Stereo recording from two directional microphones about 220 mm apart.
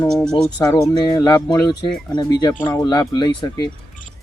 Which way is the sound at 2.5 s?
10° left (ahead or behind).